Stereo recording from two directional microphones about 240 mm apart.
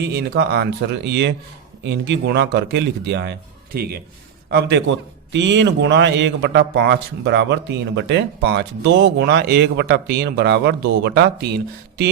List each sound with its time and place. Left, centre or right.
0.0 s a man's voice: right
4.4 s a man's voice: right